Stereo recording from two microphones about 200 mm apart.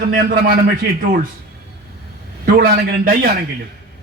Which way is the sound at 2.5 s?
45° right (ahead or behind).